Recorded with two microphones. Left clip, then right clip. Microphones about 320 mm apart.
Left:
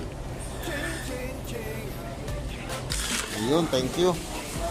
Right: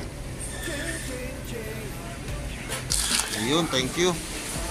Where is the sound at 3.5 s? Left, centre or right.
Centre.